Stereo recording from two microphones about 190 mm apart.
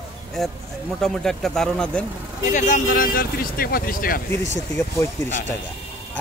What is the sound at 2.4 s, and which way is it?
Speech, 40° left (ahead or behind).